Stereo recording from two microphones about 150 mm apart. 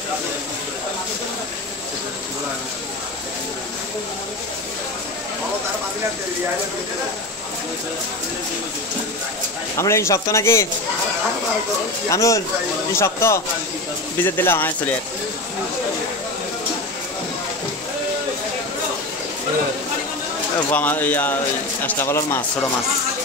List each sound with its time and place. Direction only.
9.8 s speech: 20° left (ahead or behind)
12.1 s speech: 20° left (ahead or behind)
20.7 s speech: 10° left (ahead or behind)